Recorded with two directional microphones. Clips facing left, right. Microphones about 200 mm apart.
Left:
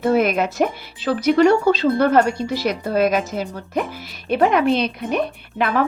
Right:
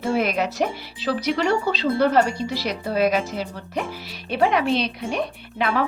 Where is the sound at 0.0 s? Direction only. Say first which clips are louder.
Left 5 dB; 55° left (ahead or behind).